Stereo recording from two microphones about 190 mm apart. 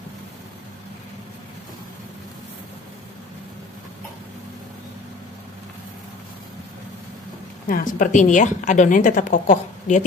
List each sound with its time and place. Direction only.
7.6 s a woman's voice: 45° left (ahead or behind)